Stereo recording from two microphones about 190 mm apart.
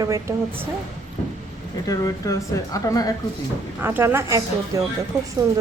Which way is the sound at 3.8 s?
10° right (ahead or behind).